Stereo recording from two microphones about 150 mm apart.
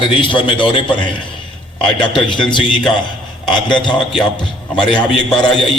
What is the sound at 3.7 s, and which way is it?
A man's voice, 5° left (ahead or behind).